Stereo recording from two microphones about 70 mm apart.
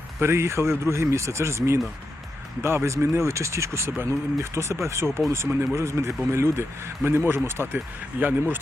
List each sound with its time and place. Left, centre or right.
0.2 s speech: right